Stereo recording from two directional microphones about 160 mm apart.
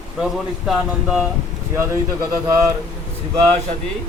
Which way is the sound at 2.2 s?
20° right (ahead or behind).